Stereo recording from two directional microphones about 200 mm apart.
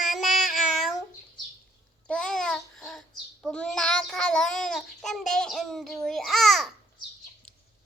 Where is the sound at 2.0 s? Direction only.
5° left (ahead or behind).